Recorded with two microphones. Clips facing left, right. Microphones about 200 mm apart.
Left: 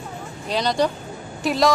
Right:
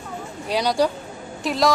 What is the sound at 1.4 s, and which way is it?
Speech, centre (ahead or behind).